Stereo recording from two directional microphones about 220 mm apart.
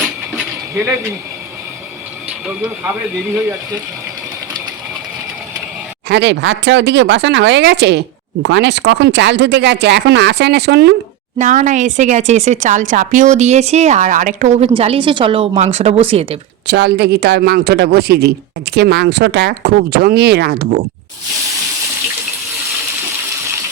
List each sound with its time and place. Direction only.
6.1 s speech: 50° right (ahead or behind)
11.3 s speech: 35° right (ahead or behind)
16.6 s speech: 50° right (ahead or behind)